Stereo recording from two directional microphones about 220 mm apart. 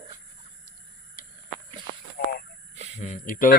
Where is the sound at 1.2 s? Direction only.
40° left (ahead or behind).